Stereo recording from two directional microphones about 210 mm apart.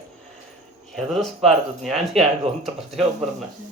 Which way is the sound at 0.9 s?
Centre (ahead or behind).